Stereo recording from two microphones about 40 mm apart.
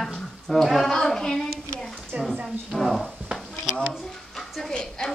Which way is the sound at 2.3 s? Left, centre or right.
Centre.